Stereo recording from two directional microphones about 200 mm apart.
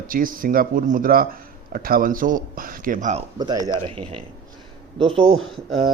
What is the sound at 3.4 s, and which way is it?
Speech, 20° right (ahead or behind).